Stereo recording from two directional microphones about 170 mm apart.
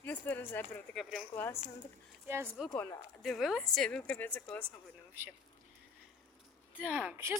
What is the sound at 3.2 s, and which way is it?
Speech, centre (ahead or behind).